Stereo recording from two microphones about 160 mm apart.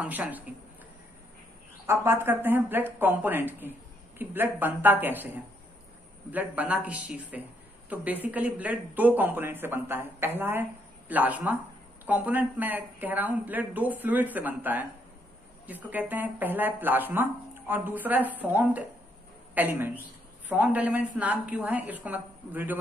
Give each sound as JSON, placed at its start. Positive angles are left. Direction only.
{"t": 0.0, "sound": "speech", "side_deg": -10}
{"t": 1.9, "sound": "speech", "side_deg": -15}
{"t": 6.3, "sound": "speech", "side_deg": -10}